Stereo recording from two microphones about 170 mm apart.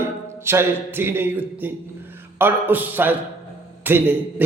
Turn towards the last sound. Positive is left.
turn(degrees=-10)  # may be behind; listen again after turning